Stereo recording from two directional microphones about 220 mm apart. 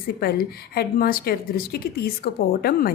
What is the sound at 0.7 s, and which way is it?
A woman's voice, 45° left (ahead or behind).